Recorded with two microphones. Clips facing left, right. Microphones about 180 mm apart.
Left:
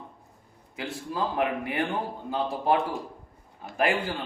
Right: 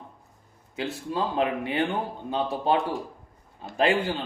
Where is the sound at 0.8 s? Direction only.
25° right (ahead or behind).